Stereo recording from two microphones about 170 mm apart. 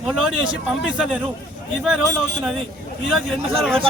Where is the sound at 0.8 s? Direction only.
5° right (ahead or behind).